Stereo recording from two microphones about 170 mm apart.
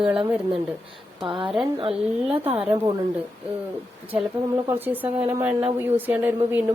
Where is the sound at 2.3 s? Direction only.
10° right (ahead or behind).